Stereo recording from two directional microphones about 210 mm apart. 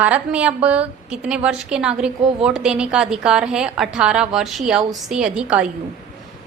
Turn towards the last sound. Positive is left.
turn(degrees=-5)  # may be behind; listen again after turning